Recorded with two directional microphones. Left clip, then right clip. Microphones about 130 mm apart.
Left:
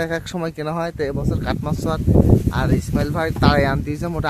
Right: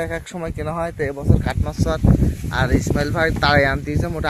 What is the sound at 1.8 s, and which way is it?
Speech, 20° left (ahead or behind).